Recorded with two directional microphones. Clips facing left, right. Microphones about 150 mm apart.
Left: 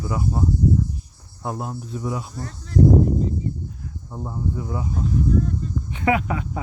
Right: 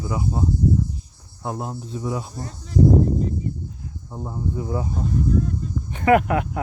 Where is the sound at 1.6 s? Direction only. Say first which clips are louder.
Even; 30° right (ahead or behind).